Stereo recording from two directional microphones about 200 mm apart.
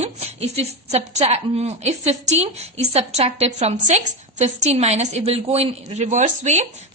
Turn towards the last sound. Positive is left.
turn(degrees=-35)  # may be behind; listen again after turning